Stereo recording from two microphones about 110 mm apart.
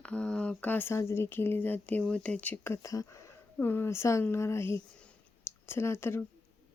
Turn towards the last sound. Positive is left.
turn(degrees=20)  # may be behind; listen again after turning